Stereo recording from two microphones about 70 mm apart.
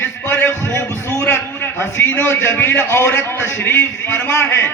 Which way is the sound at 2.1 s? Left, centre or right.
Left.